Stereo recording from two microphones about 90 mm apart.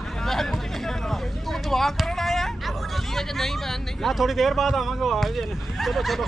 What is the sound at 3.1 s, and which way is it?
Speech, 5° left (ahead or behind).